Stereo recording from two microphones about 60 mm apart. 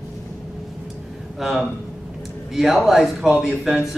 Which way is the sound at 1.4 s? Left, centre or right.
Centre.